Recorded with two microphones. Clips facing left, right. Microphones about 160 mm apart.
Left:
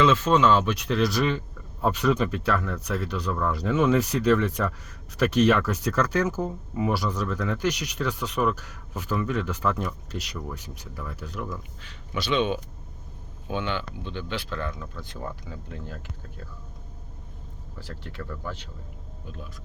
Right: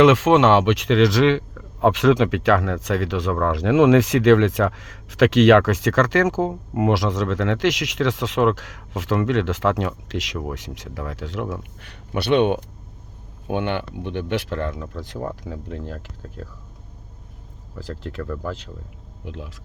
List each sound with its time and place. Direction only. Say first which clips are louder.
0.0 s a man's voice: right 6 dB; 85° right
15.4 s speech: right 7 dB; 70° right (ahead or behind)
18.2 s speech: right 6 dB; 65° right (ahead or behind)
19.2 s speech: right 7 dB; 80° right